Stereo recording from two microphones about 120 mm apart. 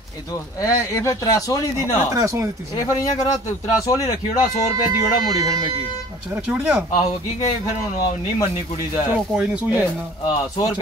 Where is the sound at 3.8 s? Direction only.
30° left (ahead or behind).